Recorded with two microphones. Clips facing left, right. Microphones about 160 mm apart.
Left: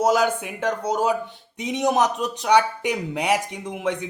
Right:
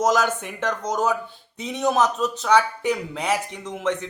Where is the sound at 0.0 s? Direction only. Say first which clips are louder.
Left 1 dB; 10° left (ahead or behind).